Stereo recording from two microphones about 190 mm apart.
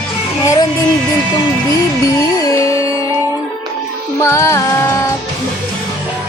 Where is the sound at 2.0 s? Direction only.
15° left (ahead or behind).